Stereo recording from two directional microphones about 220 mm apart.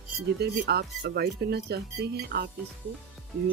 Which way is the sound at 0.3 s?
50° right (ahead or behind).